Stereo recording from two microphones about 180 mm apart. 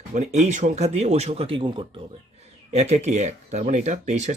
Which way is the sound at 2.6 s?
40° right (ahead or behind).